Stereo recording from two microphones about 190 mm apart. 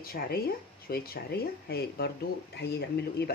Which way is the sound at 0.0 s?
50° left (ahead or behind).